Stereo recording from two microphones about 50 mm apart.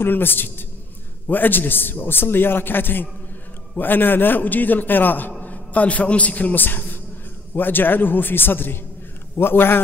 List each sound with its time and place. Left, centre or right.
0.0 s a man's voice: left